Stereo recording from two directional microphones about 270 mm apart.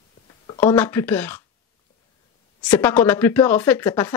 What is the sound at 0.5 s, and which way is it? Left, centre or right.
Speech, centre.